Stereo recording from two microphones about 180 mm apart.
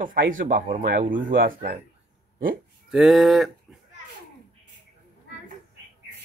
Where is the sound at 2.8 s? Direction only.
Centre (ahead or behind).